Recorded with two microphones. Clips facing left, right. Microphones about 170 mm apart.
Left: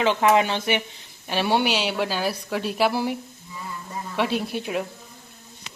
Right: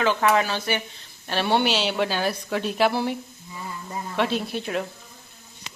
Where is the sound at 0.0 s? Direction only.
25° left (ahead or behind).